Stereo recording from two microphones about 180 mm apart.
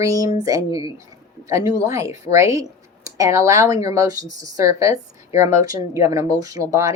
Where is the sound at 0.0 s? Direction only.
20° right (ahead or behind).